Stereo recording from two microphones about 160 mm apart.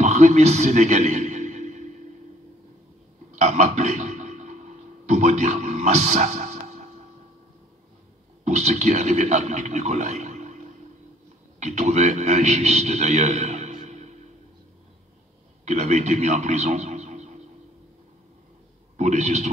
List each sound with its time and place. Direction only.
0.0 s music: 45° right (ahead or behind)
3.3 s a sound: 45° right (ahead or behind)
8.5 s a man's voice: 45° right (ahead or behind)
15.6 s a man's voice: 45° right (ahead or behind)
18.9 s a man's voice: 45° right (ahead or behind)